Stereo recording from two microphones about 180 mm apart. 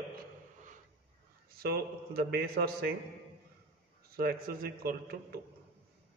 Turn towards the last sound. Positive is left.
turn(degrees=-55)  # may be behind; listen again after turning